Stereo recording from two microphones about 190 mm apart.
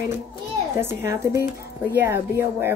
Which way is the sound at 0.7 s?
15° right (ahead or behind).